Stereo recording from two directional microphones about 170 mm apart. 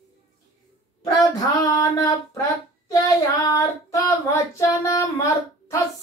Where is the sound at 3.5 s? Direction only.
15° left (ahead or behind).